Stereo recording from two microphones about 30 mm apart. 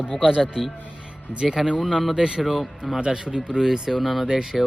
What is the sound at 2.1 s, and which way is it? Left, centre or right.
A man's voice, centre.